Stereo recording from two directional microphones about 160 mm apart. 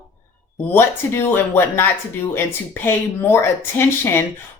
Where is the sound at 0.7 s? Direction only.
15° left (ahead or behind).